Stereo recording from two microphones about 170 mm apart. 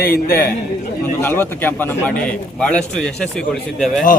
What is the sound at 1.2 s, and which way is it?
A man's voice, 10° left (ahead or behind).